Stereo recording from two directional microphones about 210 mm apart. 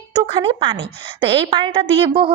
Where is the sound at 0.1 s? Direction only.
20° right (ahead or behind).